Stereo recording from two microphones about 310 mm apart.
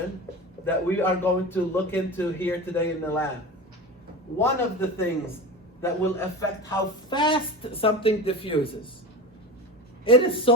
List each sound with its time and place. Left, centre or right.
0.6 s a man's voice: centre
4.4 s a man's voice: centre
10.0 s a man's voice: centre